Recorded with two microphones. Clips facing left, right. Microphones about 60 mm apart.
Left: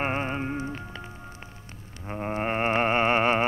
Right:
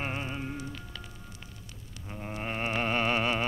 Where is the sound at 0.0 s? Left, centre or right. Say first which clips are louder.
Left 7 dB; left.